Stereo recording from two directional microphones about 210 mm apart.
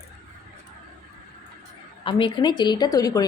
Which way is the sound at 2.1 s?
25° left (ahead or behind).